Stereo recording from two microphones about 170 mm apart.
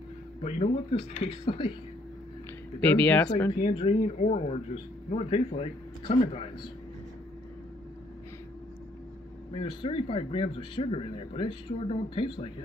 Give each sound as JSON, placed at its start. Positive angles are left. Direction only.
{"t": 0.4, "sound": "speech", "side_deg": 40}
{"t": 3.0, "sound": "speech", "side_deg": 10}
{"t": 3.8, "sound": "speech", "side_deg": 45}
{"t": 9.5, "sound": "speech", "side_deg": 30}